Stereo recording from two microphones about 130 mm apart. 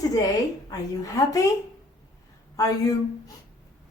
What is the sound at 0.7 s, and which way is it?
Female singing, 25° left (ahead or behind).